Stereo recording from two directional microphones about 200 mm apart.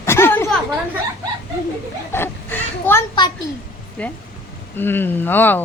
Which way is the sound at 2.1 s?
10° left (ahead or behind).